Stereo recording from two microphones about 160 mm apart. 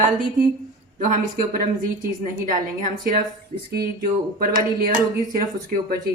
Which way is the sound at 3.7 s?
70° right (ahead or behind).